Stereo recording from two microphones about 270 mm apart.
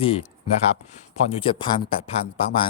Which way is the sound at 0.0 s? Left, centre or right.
Left.